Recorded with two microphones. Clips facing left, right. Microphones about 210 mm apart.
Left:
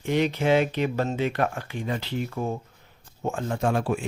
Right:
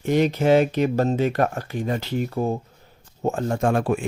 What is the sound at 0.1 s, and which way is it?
Speech, 45° right (ahead or behind).